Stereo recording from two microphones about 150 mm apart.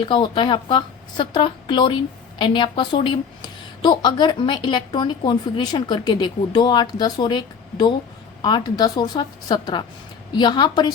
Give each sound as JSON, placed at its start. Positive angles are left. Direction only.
{"t": 0.0, "sound": "a woman's voice", "side_deg": 30}